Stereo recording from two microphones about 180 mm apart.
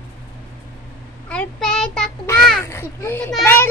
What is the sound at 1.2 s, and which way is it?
Child singing, 5° left (ahead or behind).